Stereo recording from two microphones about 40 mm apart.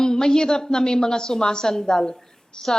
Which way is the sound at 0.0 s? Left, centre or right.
Centre.